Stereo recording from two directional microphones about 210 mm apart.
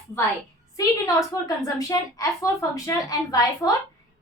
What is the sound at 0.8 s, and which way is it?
A woman's voice, 15° left (ahead or behind).